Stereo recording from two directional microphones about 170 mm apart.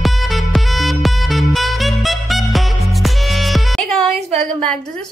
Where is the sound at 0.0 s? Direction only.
Centre (ahead or behind).